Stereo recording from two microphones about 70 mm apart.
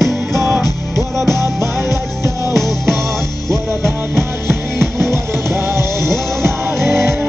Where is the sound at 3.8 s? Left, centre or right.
Right.